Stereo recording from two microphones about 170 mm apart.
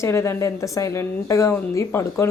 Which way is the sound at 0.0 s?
15° left (ahead or behind).